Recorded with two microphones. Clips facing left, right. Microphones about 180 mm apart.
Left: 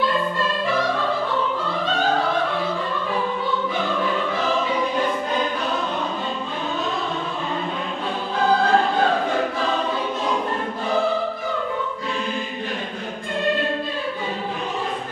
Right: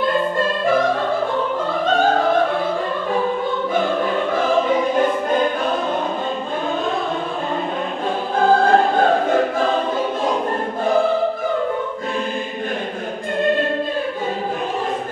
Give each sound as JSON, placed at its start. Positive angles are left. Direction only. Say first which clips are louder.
{"t": 3.7, "sound": "music", "louder": "right 4 dB", "side_deg": -50}
{"t": 8.4, "sound": "choir", "louder": "right 4 dB", "side_deg": -50}